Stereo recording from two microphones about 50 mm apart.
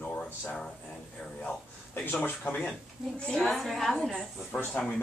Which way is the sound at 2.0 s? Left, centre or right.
Left.